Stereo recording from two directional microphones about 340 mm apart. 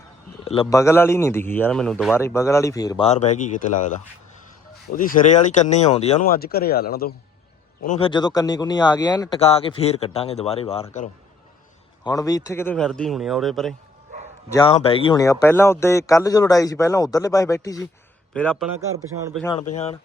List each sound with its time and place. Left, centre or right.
0.4 s speech: centre
4.9 s a man's voice: left; by 13.7 s centre
14.5 s a man's voice: centre
19.5 s speech: centre